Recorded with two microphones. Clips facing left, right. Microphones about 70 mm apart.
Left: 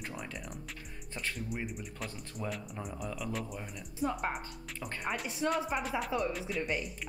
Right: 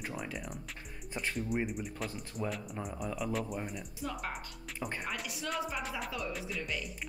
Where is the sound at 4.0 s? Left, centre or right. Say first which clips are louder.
Left 6 dB; left.